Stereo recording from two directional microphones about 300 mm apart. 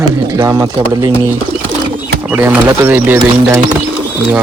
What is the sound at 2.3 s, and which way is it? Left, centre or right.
A man's voice, centre.